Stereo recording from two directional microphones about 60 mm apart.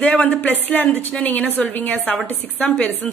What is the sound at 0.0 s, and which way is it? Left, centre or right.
A woman's voice, left.